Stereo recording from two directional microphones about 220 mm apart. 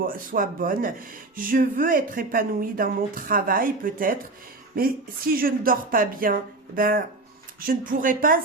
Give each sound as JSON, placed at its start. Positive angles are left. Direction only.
{"t": 0.0, "sound": "speech", "side_deg": -40}